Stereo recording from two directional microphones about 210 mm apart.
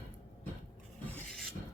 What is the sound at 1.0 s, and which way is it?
Filing, 5° left (ahead or behind).